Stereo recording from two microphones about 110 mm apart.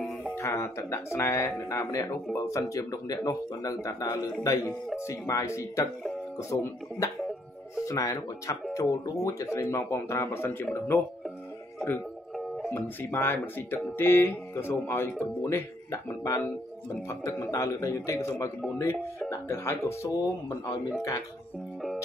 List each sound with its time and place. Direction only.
0.3 s speech: 25° left (ahead or behind)
12.4 s music: 5° left (ahead or behind)
12.7 s speech: 20° left (ahead or behind)